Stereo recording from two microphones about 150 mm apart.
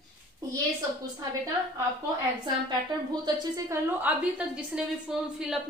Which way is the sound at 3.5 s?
15° right (ahead or behind).